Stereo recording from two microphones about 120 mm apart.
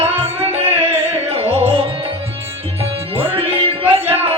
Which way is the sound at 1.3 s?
55° right (ahead or behind).